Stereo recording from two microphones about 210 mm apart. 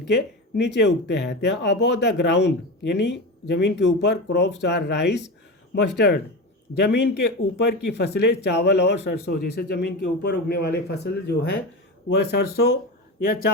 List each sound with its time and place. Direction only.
0.1 s a man's voice: 55° left (ahead or behind)